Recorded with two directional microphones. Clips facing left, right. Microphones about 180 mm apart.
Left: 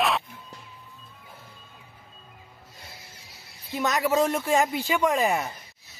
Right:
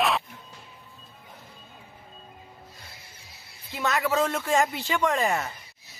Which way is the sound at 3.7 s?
15° left (ahead or behind).